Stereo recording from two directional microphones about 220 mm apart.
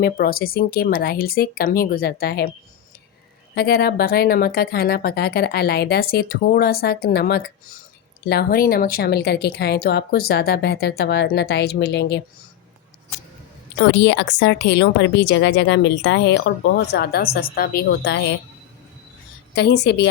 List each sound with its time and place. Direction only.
0.0 s speech: 45° left (ahead or behind)
3.5 s speech: 45° left (ahead or behind)
13.7 s speech: 55° left (ahead or behind)
19.5 s speech: 50° left (ahead or behind)